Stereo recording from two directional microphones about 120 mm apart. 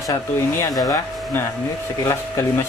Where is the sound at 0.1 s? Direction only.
25° left (ahead or behind).